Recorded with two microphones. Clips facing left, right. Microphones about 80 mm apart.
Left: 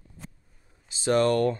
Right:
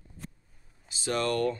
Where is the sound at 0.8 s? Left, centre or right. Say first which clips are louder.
Left 7 dB; left.